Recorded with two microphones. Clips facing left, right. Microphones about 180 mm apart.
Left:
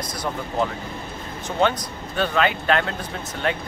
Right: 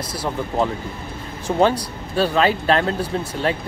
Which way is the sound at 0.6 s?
Centre (ahead or behind).